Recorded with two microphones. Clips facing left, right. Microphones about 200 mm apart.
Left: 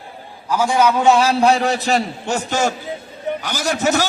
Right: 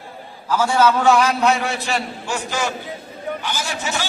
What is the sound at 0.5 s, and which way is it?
A man's voice, 15° left (ahead or behind).